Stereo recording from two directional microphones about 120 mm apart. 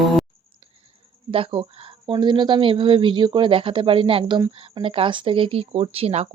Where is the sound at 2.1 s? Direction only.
40° right (ahead or behind).